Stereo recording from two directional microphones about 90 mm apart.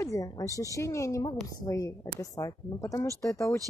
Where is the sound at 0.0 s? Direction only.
35° left (ahead or behind).